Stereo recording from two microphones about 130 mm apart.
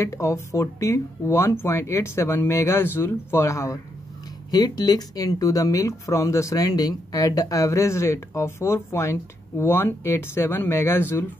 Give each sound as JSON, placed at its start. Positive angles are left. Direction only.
{"t": 0.0, "sound": "speech", "side_deg": 25}